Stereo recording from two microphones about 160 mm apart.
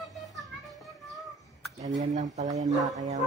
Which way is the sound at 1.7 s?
50° right (ahead or behind).